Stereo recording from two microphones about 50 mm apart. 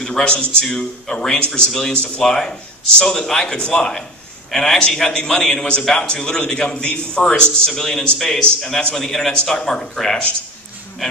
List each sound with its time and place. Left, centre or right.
0.0 s a man's voice: centre
0.3 s a man's voice: left
0.7 s a man's voice: centre
7.7 s a man's voice: centre
9.3 s a man's voice: centre